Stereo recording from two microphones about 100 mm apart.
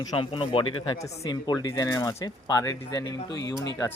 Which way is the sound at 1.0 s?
40° left (ahead or behind).